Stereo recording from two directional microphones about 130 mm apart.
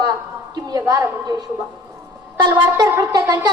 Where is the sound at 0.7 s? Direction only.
30° right (ahead or behind).